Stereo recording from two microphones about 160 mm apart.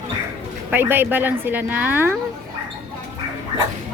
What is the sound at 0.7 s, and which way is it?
A woman's voice, 15° right (ahead or behind).